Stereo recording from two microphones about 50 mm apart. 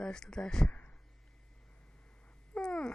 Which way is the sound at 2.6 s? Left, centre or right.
Centre.